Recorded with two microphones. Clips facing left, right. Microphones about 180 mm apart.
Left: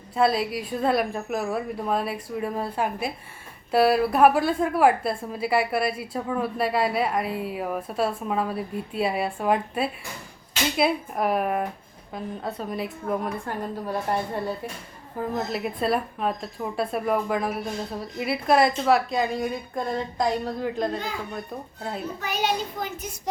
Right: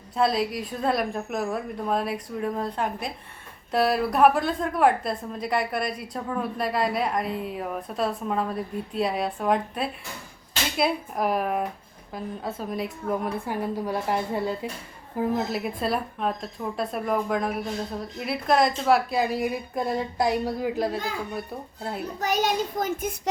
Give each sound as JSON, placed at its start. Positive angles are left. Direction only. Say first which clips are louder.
{"t": 0.2, "sound": "a woman's voice", "louder": "left 1 dB", "side_deg": 0}
{"t": 22.2, "sound": "a child's voice", "louder": "right 3 dB", "side_deg": -45}